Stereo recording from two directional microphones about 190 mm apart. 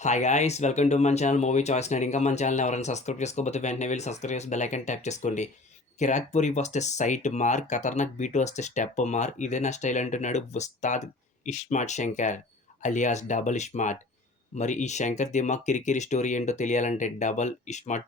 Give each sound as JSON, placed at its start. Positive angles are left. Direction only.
{"t": 0.0, "sound": "speech", "side_deg": 40}